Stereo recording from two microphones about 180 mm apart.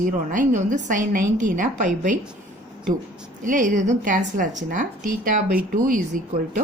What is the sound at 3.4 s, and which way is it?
A woman's voice, 45° right (ahead or behind).